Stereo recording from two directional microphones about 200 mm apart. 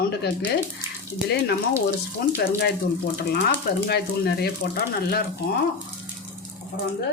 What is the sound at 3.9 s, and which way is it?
Speech, 55° left (ahead or behind).